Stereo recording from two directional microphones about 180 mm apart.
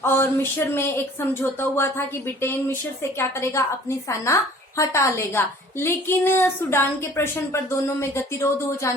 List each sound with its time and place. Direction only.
0.0 s speech: 15° left (ahead or behind)